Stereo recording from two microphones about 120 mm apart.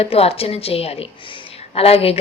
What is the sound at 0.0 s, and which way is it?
A woman's voice, 55° left (ahead or behind).